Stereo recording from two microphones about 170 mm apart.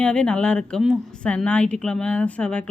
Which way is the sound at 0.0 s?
5° left (ahead or behind).